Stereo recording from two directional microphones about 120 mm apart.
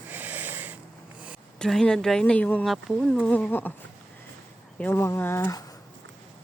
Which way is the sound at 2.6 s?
Centre (ahead or behind).